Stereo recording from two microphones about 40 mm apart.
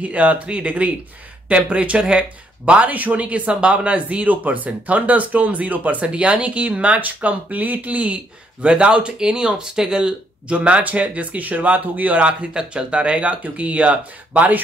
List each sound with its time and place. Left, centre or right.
0.0 s speech: right
4.3 s speech: right
6.0 s speech: right
10.5 s speech: right